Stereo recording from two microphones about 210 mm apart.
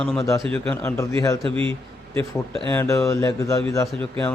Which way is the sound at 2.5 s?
10° left (ahead or behind).